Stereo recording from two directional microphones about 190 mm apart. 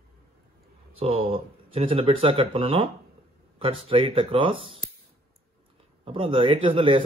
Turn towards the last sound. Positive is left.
turn(degrees=-30)  # may be behind; listen again after turning